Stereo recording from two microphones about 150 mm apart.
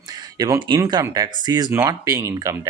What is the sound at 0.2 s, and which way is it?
Speech, 25° right (ahead or behind).